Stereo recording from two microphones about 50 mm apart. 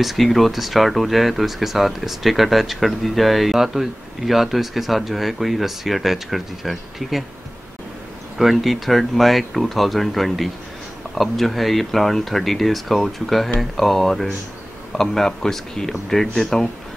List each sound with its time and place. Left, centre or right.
0.0 s speech: centre
8.4 s speech: centre